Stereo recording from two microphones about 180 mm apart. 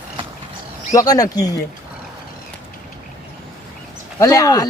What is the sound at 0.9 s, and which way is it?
Speech, 20° left (ahead or behind).